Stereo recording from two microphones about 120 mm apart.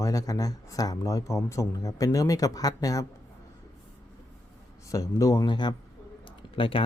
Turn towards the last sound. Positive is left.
turn(degrees=50)  # may be behind; listen again after turning